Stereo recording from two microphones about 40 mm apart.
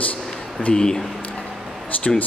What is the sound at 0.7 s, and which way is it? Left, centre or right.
Speech, centre.